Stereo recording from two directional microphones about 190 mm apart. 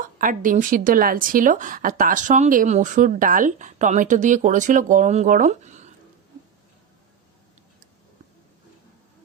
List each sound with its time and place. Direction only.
0.0 s a woman's voice: 45° right (ahead or behind)